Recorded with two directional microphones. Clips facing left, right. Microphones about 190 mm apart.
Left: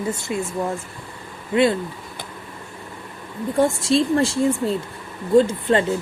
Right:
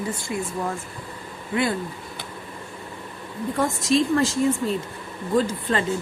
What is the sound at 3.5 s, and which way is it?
A woman's voice, 30° left (ahead or behind).